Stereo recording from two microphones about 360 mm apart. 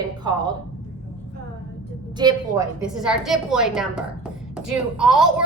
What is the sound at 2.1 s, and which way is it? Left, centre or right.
A woman's voice, centre.